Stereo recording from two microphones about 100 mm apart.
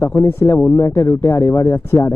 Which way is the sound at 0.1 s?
25° left (ahead or behind).